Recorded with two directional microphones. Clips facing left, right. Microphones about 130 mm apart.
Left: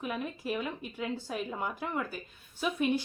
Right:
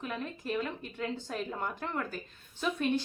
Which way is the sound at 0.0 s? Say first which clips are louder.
Left 2 dB; 10° left (ahead or behind).